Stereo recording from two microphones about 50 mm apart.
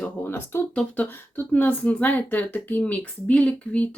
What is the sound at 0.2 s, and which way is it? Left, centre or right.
Speech, left.